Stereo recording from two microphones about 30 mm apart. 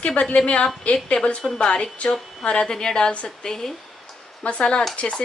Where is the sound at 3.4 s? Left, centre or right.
Left.